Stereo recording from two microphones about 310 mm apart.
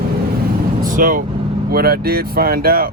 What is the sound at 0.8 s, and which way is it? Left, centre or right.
Vehicle, right.